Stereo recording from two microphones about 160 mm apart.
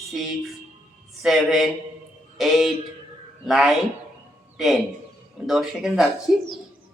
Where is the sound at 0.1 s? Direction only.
Centre (ahead or behind).